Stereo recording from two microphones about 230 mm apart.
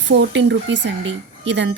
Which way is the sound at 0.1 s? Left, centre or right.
Right.